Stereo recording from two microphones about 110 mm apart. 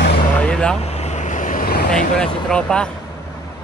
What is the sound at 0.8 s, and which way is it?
Vehicle, 85° left.